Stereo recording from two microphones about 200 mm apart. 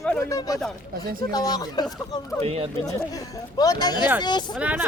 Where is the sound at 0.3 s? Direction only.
15° left (ahead or behind).